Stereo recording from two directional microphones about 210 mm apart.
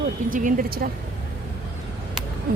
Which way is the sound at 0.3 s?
40° right (ahead or behind).